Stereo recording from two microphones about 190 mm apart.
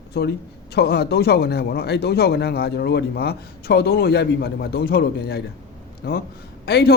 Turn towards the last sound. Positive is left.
turn(degrees=55)  # may be behind; listen again after turning